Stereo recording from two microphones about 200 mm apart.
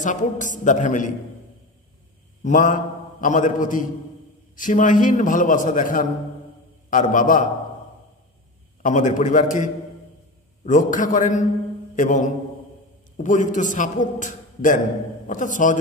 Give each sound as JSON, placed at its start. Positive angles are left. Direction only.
{"t": 0.0, "sound": "a man's voice", "side_deg": 40}
{"t": 2.4, "sound": "a man's voice", "side_deg": 40}
{"t": 8.8, "sound": "a man's voice", "side_deg": 40}
{"t": 11.9, "sound": "mantra", "side_deg": 40}
{"t": 13.2, "sound": "a man's voice", "side_deg": 40}